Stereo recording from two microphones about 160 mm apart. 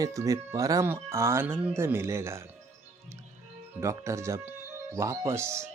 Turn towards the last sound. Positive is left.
turn(degrees=-15)  # may be behind; listen again after turning